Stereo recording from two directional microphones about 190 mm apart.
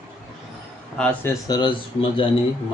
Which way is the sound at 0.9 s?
10° left (ahead or behind).